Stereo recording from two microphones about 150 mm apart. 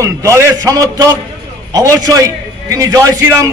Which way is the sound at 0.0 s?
20° right (ahead or behind).